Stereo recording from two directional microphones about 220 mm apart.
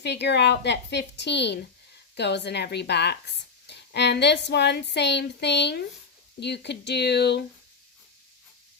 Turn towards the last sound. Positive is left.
turn(degrees=50)  # may be behind; listen again after turning